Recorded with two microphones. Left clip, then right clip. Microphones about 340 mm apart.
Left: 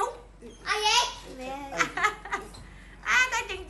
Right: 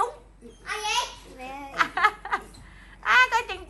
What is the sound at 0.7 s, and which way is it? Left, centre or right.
Babbling, centre.